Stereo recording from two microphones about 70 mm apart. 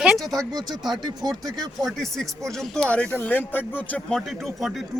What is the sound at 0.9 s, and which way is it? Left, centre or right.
Speech, right.